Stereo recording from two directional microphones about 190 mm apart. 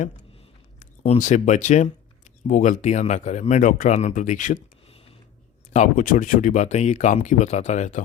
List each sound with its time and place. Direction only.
0.8 s speech: 35° left (ahead or behind)
5.7 s speech: 40° left (ahead or behind)